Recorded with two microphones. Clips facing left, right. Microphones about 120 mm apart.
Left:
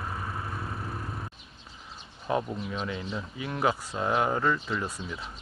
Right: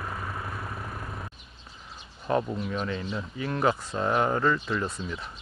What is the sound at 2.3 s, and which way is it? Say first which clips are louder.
Speech: right 2 dB; 5° left (ahead or behind).